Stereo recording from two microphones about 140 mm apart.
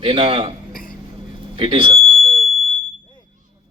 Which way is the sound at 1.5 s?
40° right (ahead or behind).